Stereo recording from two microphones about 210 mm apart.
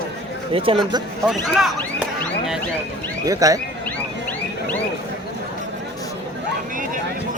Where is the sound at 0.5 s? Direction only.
25° right (ahead or behind).